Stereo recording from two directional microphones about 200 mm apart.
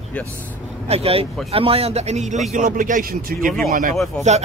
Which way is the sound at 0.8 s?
30° right (ahead or behind).